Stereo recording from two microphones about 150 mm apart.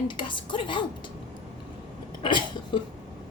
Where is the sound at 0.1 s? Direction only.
35° left (ahead or behind).